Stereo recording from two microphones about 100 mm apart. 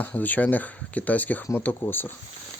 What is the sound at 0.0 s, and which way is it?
Speech, 15° left (ahead or behind).